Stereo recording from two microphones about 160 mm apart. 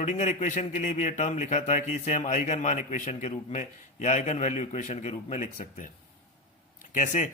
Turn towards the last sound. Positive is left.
turn(degrees=50)  # may be behind; listen again after turning